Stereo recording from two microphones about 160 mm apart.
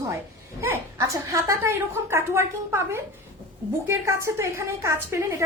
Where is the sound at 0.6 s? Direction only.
15° right (ahead or behind).